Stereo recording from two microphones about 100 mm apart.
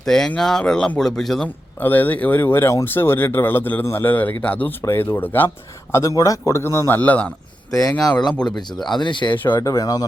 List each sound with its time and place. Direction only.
0.0 s speech: 5° left (ahead or behind)
1.8 s speech: 20° left (ahead or behind)
5.9 s speech: 35° left (ahead or behind); by 7.3 s 15° left (ahead or behind)
7.7 s speech: 35° left (ahead or behind)
8.3 s speech: 10° left (ahead or behind)
8.9 s speech: 50° left (ahead or behind)
9.6 s speech: 35° left (ahead or behind)